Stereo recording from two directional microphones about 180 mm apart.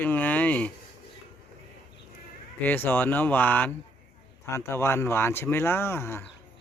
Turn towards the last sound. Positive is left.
turn(degrees=15)  # may be behind; listen again after turning